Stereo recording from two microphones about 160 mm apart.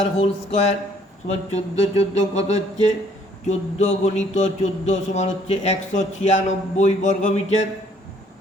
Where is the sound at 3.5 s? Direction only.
45° left (ahead or behind).